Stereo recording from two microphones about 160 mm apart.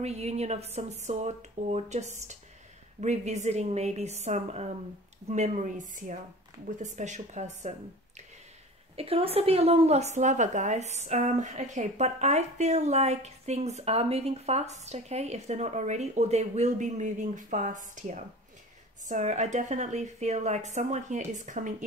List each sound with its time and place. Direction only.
0.0 s a woman's voice: 40° right (ahead or behind)
8.9 s a woman's voice: 35° right (ahead or behind)